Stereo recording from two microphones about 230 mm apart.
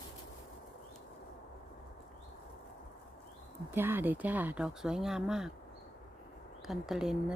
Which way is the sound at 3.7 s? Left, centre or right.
Centre.